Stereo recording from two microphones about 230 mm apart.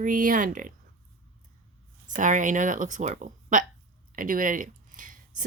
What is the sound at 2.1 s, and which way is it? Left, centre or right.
Speech, right.